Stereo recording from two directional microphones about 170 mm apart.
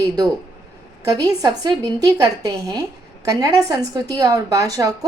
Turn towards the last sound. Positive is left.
turn(degrees=-20)  # may be behind; listen again after turning